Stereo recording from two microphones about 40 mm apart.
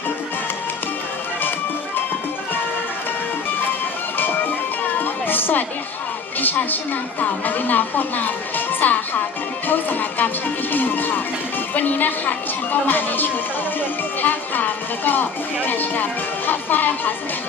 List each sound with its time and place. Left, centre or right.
4.8 s music: left
6.4 s speech: left
9.6 s music: left
11.7 s speech: left
14.2 s music: left
15.6 s speech: left